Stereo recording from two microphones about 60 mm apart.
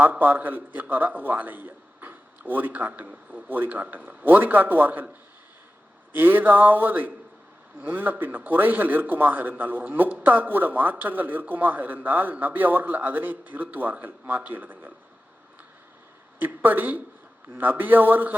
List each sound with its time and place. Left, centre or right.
0.0 s a man's voice: right
6.1 s a man's voice: right
16.4 s a man's voice: right